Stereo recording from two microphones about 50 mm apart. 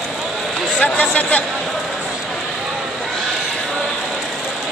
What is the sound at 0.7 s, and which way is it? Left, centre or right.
Speech, left.